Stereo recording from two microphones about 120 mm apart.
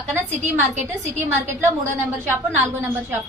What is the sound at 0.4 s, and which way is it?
Speech, 75° right (ahead or behind).